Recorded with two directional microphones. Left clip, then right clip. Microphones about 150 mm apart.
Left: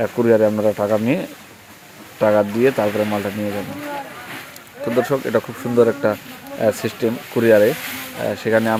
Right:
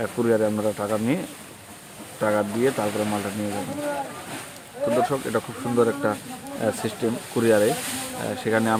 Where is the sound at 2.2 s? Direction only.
25° left (ahead or behind).